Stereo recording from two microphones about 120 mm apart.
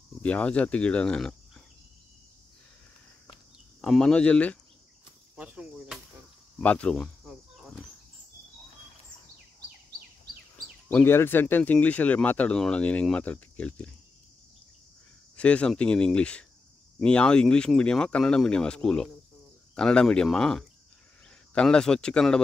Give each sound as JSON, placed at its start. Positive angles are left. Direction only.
{"t": 0.2, "sound": "speech", "side_deg": 10}
{"t": 3.8, "sound": "speech", "side_deg": 5}
{"t": 5.3, "sound": "speech", "side_deg": -10}
{"t": 6.6, "sound": "speech", "side_deg": 10}
{"t": 7.2, "sound": "cricket", "side_deg": 0}
{"t": 10.9, "sound": "speech", "side_deg": 15}
{"t": 15.3, "sound": "speech", "side_deg": 10}